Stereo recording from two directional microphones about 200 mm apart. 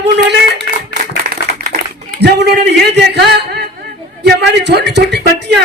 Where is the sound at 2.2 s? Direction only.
55° right (ahead or behind).